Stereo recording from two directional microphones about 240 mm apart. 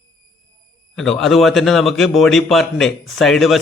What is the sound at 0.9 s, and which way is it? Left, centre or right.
A man's voice, centre.